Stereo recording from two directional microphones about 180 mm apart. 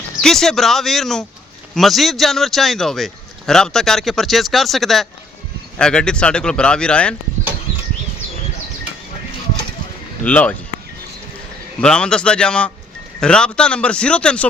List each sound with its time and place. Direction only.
0.2 s a man's voice: centre (ahead or behind)
10.2 s speech: 10° left (ahead or behind)
11.8 s a man's voice: 5° left (ahead or behind)